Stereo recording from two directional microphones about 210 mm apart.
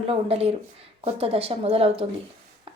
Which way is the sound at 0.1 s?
30° right (ahead or behind).